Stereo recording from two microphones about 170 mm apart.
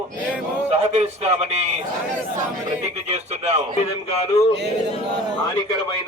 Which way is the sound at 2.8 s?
40° right (ahead or behind).